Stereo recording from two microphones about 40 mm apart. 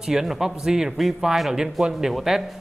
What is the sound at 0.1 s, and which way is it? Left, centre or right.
Speech, centre.